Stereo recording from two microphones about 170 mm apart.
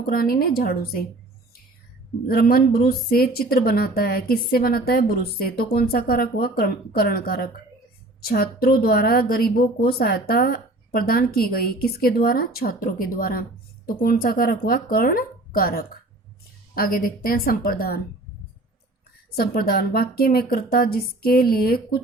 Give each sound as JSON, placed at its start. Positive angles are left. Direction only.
{"t": 0.0, "sound": "a woman's voice", "side_deg": 60}
{"t": 2.2, "sound": "a woman's voice", "side_deg": 65}
{"t": 19.4, "sound": "a woman's voice", "side_deg": 60}